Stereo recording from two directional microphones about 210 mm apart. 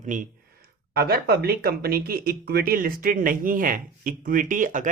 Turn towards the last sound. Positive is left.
turn(degrees=-40)  # may be behind; listen again after turning